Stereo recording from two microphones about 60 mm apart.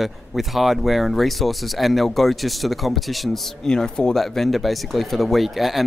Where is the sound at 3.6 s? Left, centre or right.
Centre.